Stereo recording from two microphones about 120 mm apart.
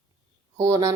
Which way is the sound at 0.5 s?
25° right (ahead or behind).